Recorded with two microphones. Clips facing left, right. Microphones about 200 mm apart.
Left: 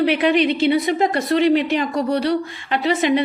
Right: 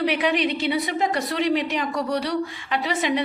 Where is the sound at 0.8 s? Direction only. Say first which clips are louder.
Left 6 dB; 55° left (ahead or behind).